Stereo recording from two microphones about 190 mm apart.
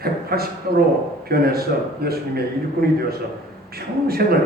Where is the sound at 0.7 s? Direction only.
50° right (ahead or behind).